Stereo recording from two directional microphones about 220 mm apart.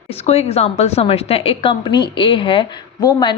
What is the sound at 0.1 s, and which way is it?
A woman's voice, 30° left (ahead or behind).